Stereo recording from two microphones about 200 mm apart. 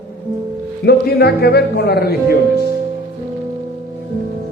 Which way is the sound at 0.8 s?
55° left (ahead or behind).